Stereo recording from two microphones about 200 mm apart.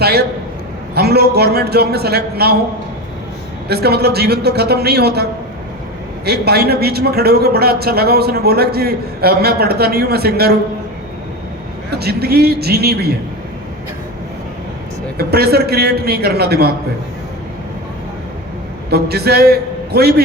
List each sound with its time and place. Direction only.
0.0 s a man's voice: 55° right (ahead or behind)
3.7 s a man's voice: 55° right (ahead or behind)
6.2 s a man's voice: 55° right (ahead or behind)
11.9 s a man's voice: 55° right (ahead or behind)
15.2 s a man's voice: 50° right (ahead or behind)
18.9 s a man's voice: 55° right (ahead or behind)